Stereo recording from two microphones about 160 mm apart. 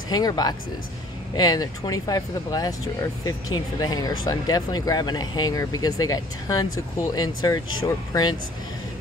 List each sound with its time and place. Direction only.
0.1 s speech: 25° left (ahead or behind)